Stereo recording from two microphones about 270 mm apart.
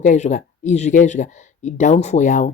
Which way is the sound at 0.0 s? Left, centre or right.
Left.